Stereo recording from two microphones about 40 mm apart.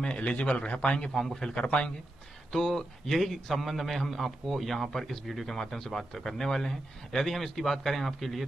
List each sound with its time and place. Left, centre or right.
0.0 s a man's voice: left
1.1 s a man's voice: centre
1.5 s a man's voice: left
2.5 s a man's voice: centre